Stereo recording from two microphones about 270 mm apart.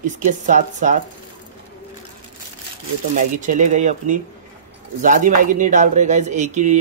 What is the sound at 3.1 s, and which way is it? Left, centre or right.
Speech, right.